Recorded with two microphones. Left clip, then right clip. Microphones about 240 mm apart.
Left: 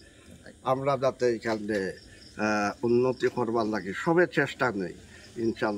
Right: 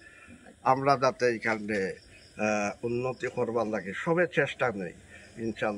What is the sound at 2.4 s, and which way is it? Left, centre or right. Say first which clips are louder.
Speech: left 2 dB; centre.